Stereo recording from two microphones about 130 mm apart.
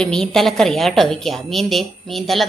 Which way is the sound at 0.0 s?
5° left (ahead or behind).